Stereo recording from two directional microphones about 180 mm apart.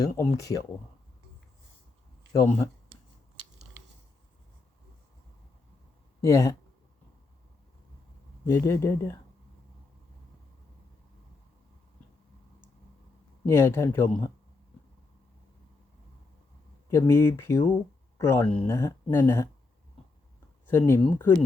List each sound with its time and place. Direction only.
0.0 s speech: 20° left (ahead or behind)
2.3 s speech: 15° left (ahead or behind)
6.2 s speech: 15° left (ahead or behind)
8.4 s speech: 15° left (ahead or behind)
13.4 s speech: 15° left (ahead or behind)
16.9 s speech: 15° left (ahead or behind)
20.7 s speech: 10° left (ahead or behind)